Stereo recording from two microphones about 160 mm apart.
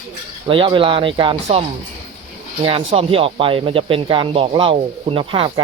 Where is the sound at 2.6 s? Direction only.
35° right (ahead or behind).